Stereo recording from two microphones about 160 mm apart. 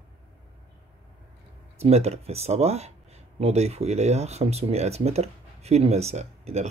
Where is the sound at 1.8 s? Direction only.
40° right (ahead or behind).